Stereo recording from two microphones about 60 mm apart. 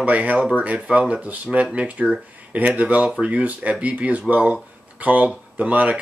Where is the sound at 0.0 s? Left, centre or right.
Right.